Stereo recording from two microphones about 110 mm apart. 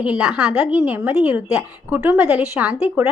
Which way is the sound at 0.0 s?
10° right (ahead or behind).